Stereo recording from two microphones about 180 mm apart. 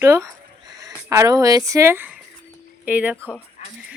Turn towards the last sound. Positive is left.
turn(degrees=-10)  # may be behind; listen again after turning